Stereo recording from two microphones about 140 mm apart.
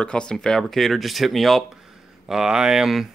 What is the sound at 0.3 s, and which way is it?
Speech, 5° left (ahead or behind).